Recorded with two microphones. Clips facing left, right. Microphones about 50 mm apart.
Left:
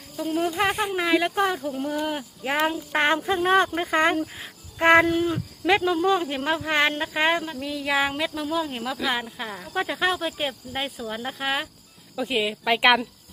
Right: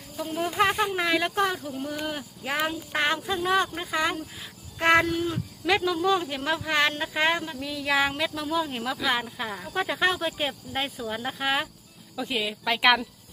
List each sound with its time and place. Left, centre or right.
0.6 s speech: centre
3.0 s speech: left
4.2 s speech: left; by 11.7 s centre
12.1 s speech: centre